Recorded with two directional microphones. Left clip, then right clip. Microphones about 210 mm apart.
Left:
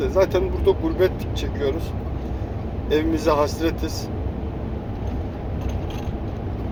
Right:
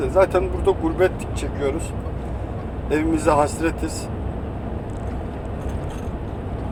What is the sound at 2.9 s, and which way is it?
Speech, 5° right (ahead or behind).